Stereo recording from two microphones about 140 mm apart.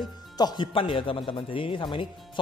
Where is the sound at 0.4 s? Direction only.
30° left (ahead or behind).